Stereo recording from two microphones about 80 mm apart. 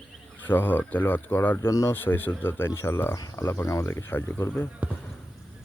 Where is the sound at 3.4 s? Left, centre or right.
Left.